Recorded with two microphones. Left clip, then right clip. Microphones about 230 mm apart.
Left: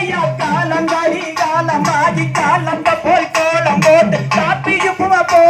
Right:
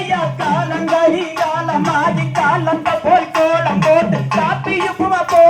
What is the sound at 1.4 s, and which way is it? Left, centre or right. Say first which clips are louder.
Music: left 5 dB; left.